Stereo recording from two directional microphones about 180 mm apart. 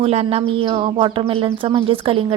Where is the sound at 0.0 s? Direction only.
35° right (ahead or behind).